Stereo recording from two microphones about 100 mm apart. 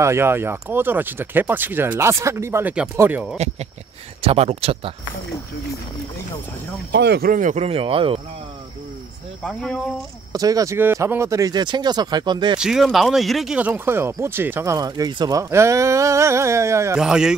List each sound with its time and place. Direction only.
0.0 s speech: 25° right (ahead or behind)
4.2 s speech: 85° right
7.6 s speech: 70° right (ahead or behind)
9.4 s speech: 5° left (ahead or behind)
10.3 s speech: 35° right (ahead or behind)
10.8 s speech: 25° right (ahead or behind); by 12.5 s 50° right (ahead or behind)
12.5 s speech: 5° right (ahead or behind)
13.6 s speech: 20° right (ahead or behind)
14.8 s speech: 45° right (ahead or behind)
15.5 s speech: 30° right (ahead or behind)
17.0 s speech: 5° right (ahead or behind)